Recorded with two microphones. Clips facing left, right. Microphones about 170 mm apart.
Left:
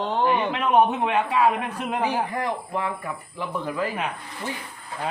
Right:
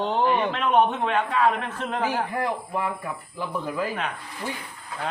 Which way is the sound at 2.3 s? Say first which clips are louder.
Even; 5° right (ahead or behind).